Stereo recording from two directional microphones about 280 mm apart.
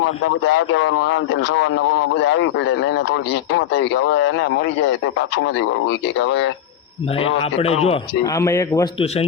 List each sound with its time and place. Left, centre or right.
0.0 s a man's voice: left
7.9 s a man's voice: centre